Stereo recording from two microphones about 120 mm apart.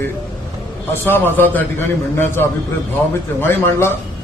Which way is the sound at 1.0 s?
15° left (ahead or behind).